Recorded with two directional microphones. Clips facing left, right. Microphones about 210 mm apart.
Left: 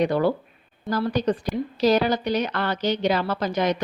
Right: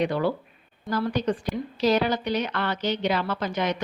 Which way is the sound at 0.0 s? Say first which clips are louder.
Left 3 dB; 40° left (ahead or behind).